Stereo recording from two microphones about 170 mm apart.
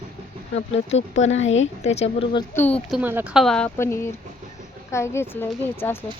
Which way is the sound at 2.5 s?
10° left (ahead or behind).